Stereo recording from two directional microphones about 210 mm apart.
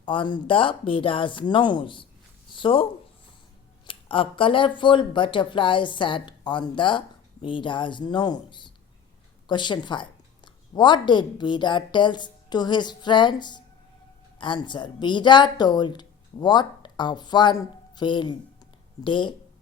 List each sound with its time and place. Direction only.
0.0 s a woman's voice: 25° left (ahead or behind)
2.5 s a sound: 25° left (ahead or behind)
3.8 s a woman's voice: 25° left (ahead or behind)